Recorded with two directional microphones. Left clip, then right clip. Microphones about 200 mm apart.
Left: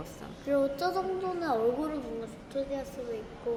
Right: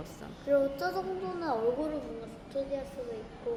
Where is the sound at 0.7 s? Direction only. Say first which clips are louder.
Left 3 dB; 15° left (ahead or behind).